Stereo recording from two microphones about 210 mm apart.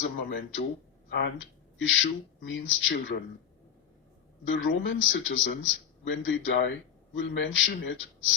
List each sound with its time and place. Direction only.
0.0 s a man's voice: 60° left (ahead or behind)
4.4 s a man's voice: 60° left (ahead or behind)